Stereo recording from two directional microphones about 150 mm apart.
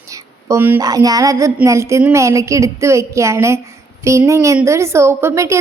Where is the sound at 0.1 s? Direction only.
20° right (ahead or behind).